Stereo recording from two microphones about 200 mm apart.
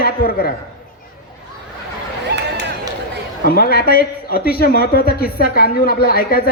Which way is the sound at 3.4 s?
50° left (ahead or behind).